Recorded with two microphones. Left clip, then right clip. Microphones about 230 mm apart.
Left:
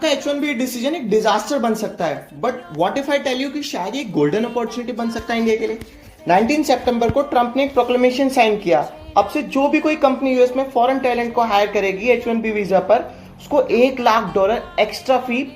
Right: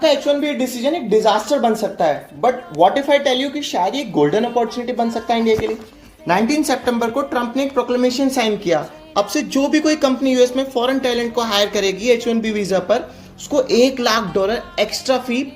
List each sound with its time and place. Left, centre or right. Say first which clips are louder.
0.0 s a woman's voice: right 4 dB; centre
6.2 s speech: left 2 dB; right